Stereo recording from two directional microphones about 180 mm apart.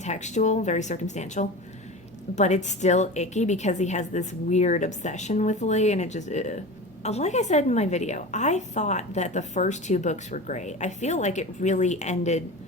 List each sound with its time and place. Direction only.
0.0 s a woman's voice: 40° left (ahead or behind)